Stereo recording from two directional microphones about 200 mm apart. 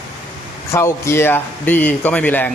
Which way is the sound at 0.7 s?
15° left (ahead or behind).